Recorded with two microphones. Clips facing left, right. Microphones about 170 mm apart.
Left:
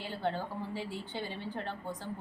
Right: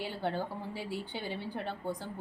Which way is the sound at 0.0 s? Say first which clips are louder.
Right 1 dB; 15° right (ahead or behind).